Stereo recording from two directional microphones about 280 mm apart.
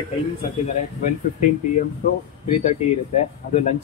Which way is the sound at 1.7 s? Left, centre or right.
Left.